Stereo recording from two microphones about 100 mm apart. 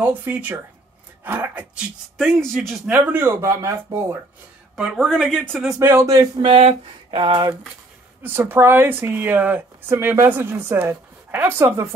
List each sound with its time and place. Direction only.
0.0 s speech: 20° right (ahead or behind)
2.4 s speech: centre (ahead or behind)
2.9 s speech: 20° right (ahead or behind)
4.7 s speech: 5° right (ahead or behind)
5.8 s speech: 25° right (ahead or behind)
6.4 s speech: 65° right (ahead or behind)
8.2 s speech: 20° right (ahead or behind)